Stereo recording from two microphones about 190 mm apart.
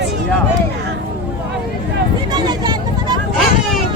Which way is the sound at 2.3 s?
20° right (ahead or behind).